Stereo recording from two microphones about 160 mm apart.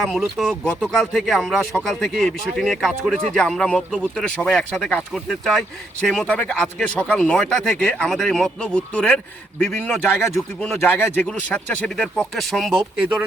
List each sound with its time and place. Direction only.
0.0 s speech: centre (ahead or behind)